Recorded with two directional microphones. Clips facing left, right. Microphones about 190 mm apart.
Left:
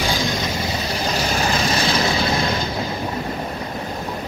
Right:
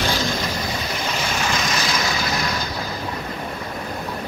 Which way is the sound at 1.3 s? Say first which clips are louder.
Left 3 dB; 35° left (ahead or behind).